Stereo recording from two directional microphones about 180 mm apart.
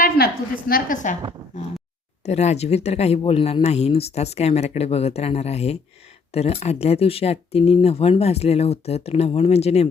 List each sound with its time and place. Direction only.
0.0 s a woman's voice: 55° left (ahead or behind)
2.2 s speech: 40° left (ahead or behind)